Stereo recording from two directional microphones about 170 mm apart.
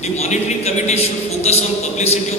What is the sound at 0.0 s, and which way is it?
A man's voice, 40° left (ahead or behind).